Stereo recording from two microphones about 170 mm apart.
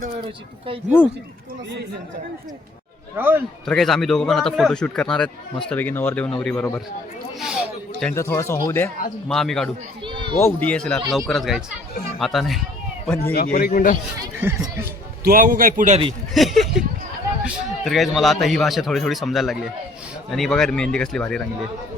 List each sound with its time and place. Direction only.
3.2 s speech: 10° right (ahead or behind)
3.7 s a man's voice: centre (ahead or behind)
7.3 s a sound: 5° right (ahead or behind)
8.1 s speech: 15° left (ahead or behind)
9.3 s a man's voice: centre (ahead or behind)
10.0 s a sound: 30° right (ahead or behind)
10.4 s a man's voice: 10° left (ahead or behind)
13.2 s a man's voice: 60° left (ahead or behind)
14.2 s speech: 15° right (ahead or behind)
15.2 s a man's voice: 55° right (ahead or behind)
16.3 s a man's voice: centre (ahead or behind)